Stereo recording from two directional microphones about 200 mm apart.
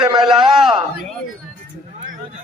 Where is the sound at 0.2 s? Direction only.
Centre (ahead or behind).